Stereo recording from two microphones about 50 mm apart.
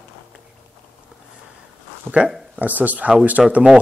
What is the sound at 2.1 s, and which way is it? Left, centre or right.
Speech, centre.